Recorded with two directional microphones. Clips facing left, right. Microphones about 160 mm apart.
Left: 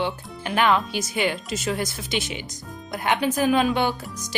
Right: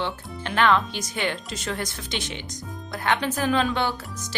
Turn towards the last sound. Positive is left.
turn(degrees=15)  # may be behind; listen again after turning